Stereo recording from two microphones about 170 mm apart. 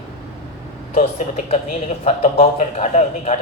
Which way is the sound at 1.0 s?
40° left (ahead or behind).